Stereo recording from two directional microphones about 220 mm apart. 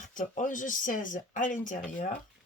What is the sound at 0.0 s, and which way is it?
Speech, 35° left (ahead or behind).